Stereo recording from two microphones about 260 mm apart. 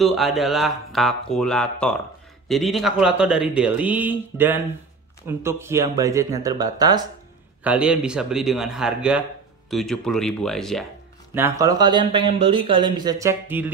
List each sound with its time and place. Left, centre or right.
0.0 s a man's voice: centre
7.6 s a man's voice: centre
11.3 s speech: centre